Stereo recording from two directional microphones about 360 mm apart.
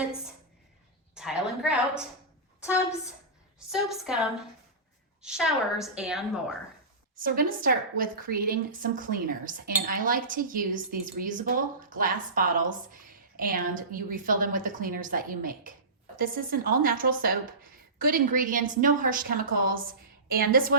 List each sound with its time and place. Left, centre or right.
1.1 s a sound: centre
2.6 s a woman's voice: centre
7.6 s a woman's voice: right